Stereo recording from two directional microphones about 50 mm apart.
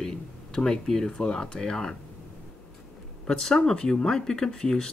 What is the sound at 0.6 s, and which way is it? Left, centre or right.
Speech, centre.